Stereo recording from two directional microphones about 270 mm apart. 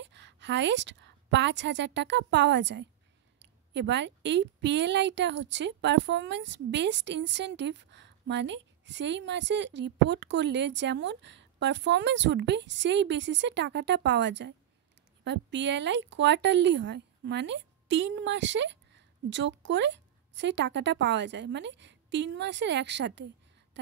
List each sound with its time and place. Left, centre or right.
0.0 s a woman's voice: right